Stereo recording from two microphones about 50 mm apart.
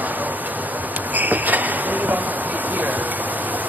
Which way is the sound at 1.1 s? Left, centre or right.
Right.